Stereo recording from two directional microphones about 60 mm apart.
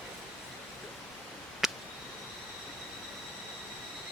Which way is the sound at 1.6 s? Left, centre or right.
Centre.